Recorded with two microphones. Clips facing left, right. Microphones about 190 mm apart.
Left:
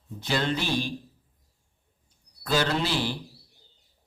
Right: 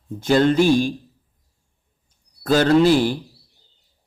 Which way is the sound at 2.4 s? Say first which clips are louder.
Right 11 dB; 50° right (ahead or behind).